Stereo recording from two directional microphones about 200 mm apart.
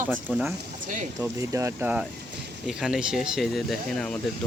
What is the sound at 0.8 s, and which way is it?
Speech, 40° right (ahead or behind).